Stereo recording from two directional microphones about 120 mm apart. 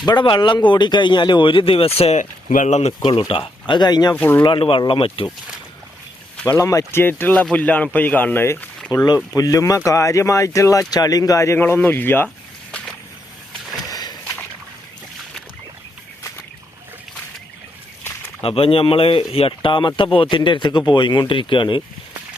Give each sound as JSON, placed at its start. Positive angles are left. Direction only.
{"t": 0.0, "sound": "speech", "side_deg": 40}
{"t": 2.0, "sound": "speech", "side_deg": 75}
{"t": 3.0, "sound": "speech", "side_deg": 45}
{"t": 4.1, "sound": "speech", "side_deg": 15}
{"t": 4.4, "sound": "speech", "side_deg": 45}
{"t": 6.3, "sound": "a sound", "side_deg": 15}
{"t": 6.6, "sound": "speech", "side_deg": 25}
{"t": 8.9, "sound": "speech", "side_deg": 30}
{"t": 13.8, "sound": "a sound", "side_deg": 30}
{"t": 18.4, "sound": "speech", "side_deg": 50}